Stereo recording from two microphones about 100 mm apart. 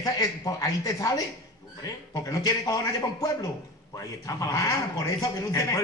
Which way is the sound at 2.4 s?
40° left (ahead or behind).